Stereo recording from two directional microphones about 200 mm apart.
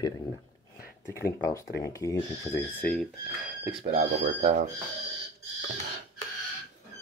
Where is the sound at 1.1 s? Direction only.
15° left (ahead or behind).